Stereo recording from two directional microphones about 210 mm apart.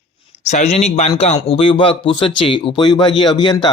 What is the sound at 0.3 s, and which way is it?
Speech, 35° left (ahead or behind).